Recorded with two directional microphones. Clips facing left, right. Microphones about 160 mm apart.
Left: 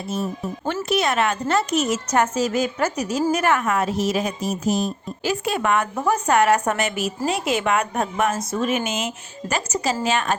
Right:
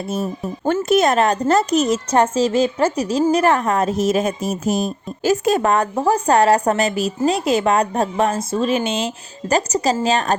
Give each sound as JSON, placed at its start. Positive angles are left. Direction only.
{"t": 0.6, "sound": "a woman's voice", "side_deg": -45}